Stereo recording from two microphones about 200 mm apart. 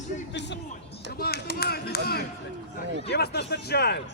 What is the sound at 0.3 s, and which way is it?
A man's voice, 60° left (ahead or behind).